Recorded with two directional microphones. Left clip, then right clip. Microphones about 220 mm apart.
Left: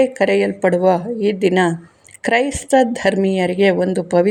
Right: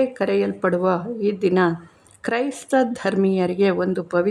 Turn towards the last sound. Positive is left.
turn(degrees=5)  # may be behind; listen again after turning